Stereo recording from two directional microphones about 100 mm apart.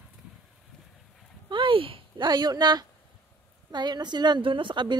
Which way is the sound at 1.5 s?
60° right (ahead or behind).